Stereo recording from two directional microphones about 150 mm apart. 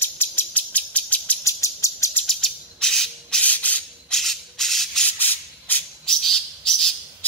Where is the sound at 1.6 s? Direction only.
20° left (ahead or behind).